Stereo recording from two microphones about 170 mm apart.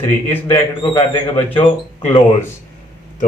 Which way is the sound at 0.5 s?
15° left (ahead or behind).